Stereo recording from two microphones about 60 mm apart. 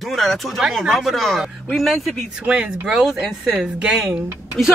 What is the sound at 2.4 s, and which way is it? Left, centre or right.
Speech, centre.